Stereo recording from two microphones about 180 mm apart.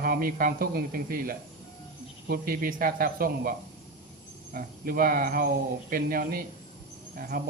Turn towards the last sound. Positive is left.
turn(degrees=-55)  # may be behind; listen again after turning